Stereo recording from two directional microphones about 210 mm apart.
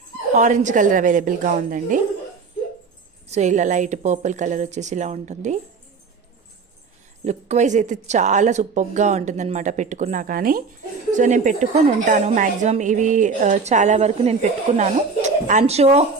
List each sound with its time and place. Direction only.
0.3 s a woman's voice: 35° right (ahead or behind)
3.2 s a woman's voice: 35° right (ahead or behind)
7.3 s a woman's voice: 35° right (ahead or behind)